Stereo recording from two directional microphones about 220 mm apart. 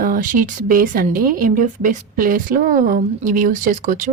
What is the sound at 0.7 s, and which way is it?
A woman's voice, 40° right (ahead or behind).